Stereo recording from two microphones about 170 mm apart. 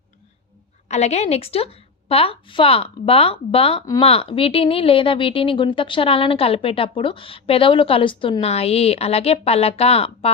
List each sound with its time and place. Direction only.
0.9 s a woman's voice: 40° left (ahead or behind)